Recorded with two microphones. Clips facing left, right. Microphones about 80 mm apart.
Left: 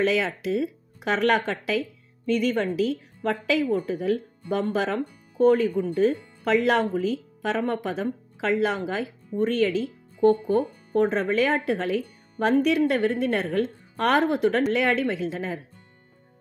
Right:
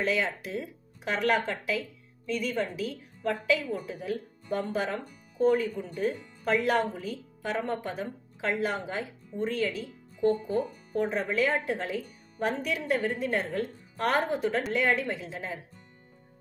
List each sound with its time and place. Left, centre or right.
0.0 s speech: left
2.2 s a woman's voice: left